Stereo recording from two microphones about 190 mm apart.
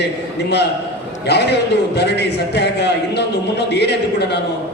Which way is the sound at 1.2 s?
60° left (ahead or behind).